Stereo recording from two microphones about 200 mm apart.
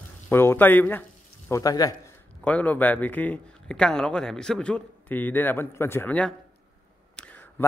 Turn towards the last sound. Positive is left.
turn(degrees=5)  # may be behind; listen again after turning